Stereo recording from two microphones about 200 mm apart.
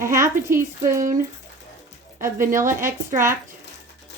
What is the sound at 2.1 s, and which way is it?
Speech, 15° right (ahead or behind).